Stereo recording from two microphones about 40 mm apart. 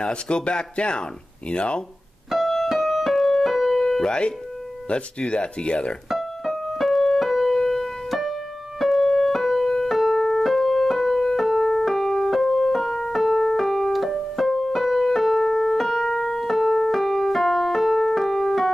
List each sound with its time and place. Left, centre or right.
0.0 s speech: left
2.3 s keyboard: centre
4.0 s speech: left
6.0 s piano: centre
7.2 s keyboard: centre
11.0 s music: centre
11.2 s keyboard: centre